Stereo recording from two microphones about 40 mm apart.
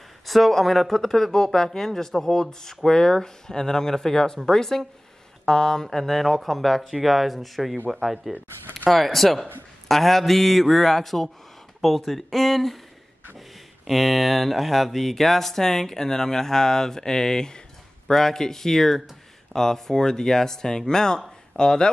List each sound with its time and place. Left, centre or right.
0.3 s speech: centre
5.9 s a man's voice: centre
13.8 s speech: centre